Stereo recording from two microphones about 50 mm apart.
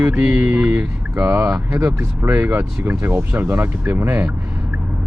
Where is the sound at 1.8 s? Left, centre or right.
Right.